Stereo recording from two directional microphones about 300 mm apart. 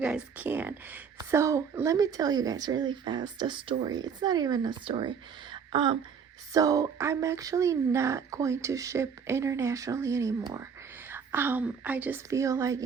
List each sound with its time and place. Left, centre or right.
0.0 s speech: centre